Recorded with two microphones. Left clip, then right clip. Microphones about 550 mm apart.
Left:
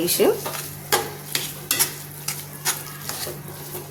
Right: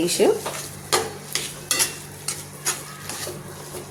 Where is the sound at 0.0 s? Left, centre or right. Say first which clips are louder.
Right 1 dB; left.